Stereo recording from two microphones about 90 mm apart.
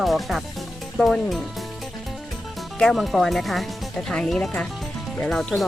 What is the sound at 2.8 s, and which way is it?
Speech, 5° left (ahead or behind).